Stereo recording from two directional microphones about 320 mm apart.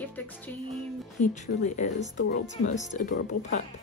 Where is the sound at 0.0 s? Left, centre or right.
Centre.